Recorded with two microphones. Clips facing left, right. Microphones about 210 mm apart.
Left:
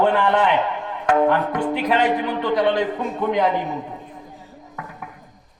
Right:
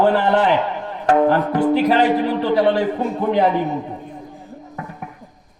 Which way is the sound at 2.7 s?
30° right (ahead or behind).